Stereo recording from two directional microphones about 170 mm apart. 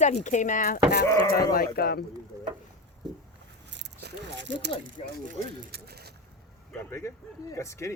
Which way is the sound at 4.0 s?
85° right.